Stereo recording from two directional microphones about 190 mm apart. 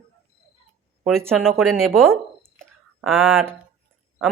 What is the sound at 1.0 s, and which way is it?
Speech, 5° left (ahead or behind).